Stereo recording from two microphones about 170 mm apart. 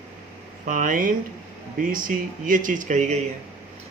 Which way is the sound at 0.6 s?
50° right (ahead or behind).